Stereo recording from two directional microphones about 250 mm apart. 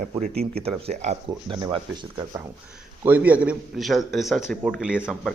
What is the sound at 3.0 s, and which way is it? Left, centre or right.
Speech, centre.